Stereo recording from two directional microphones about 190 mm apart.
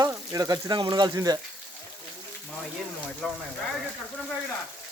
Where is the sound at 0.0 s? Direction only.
20° right (ahead or behind).